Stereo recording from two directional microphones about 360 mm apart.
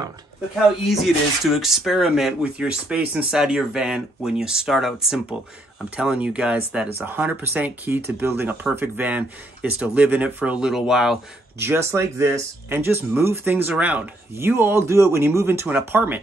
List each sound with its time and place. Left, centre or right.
0.8 s speech: centre